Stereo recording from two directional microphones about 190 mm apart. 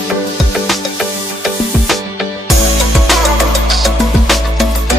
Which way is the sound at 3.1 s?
Centre (ahead or behind).